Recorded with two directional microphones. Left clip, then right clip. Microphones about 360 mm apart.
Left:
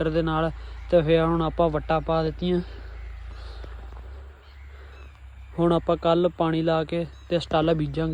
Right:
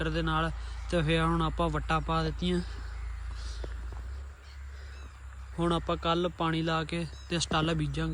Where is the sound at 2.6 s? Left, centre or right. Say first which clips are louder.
Left 6 dB; centre.